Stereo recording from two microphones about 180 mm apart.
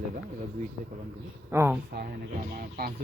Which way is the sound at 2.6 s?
55° right (ahead or behind).